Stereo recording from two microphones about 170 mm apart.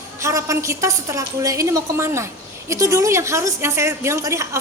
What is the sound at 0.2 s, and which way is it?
A woman's voice, 20° right (ahead or behind).